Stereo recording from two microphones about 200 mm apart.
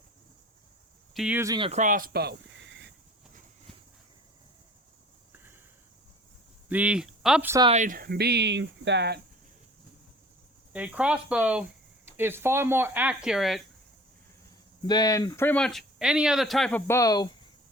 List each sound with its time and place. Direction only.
1.1 s speech: 5° right (ahead or behind)
1.5 s speech: 25° right (ahead or behind)
1.8 s a sound: 45° right (ahead or behind); by 2.9 s 65° right (ahead or behind)
5.3 s a sound: 10° right (ahead or behind)
6.7 s speech: 5° right (ahead or behind)
7.7 s speech: 40° right (ahead or behind); by 9.2 s 55° right (ahead or behind)
10.7 s speech: 5° right (ahead or behind)
14.8 s speech: 20° left (ahead or behind)